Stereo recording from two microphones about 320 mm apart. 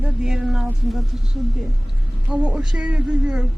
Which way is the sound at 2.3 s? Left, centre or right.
Centre.